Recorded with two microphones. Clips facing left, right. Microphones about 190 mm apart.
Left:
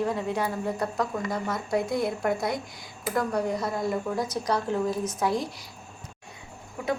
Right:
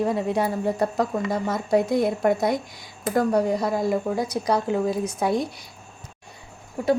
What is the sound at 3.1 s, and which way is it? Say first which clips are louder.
Speech: right 6 dB; 30° right (ahead or behind).